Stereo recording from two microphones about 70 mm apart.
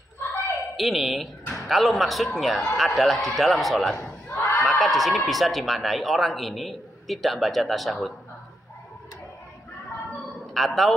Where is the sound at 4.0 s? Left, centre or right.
Left.